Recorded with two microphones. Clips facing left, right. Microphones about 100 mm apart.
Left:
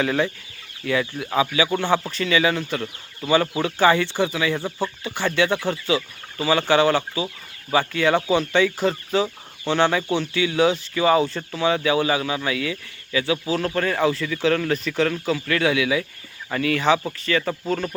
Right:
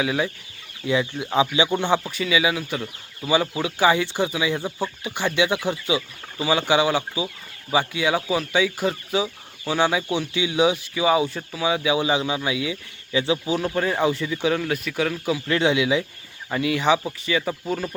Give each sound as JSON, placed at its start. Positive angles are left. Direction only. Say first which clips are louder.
{"t": 0.0, "sound": "speech", "louder": "left 2 dB", "side_deg": -5}
{"t": 0.9, "sound": "speech", "louder": "even", "side_deg": -20}
{"t": 13.5, "sound": "speech", "louder": "even", "side_deg": -10}
{"t": 15.4, "sound": "speech", "louder": "right 1 dB", "side_deg": -25}